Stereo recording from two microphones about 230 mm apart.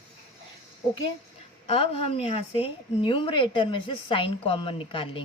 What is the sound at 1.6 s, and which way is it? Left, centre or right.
A woman's voice, left.